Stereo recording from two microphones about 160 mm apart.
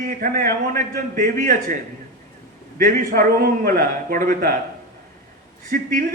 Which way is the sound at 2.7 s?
60° right (ahead or behind).